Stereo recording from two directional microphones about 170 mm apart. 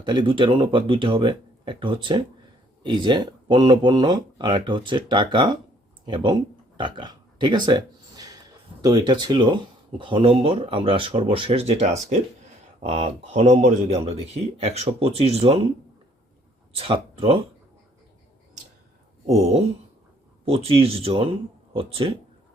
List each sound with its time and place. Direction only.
0.0 s speech: 30° right (ahead or behind)
6.1 s a sound: 30° right (ahead or behind)
8.8 s speech: 25° right (ahead or behind)
16.7 s speech: 35° right (ahead or behind)
19.2 s speech: 40° right (ahead or behind)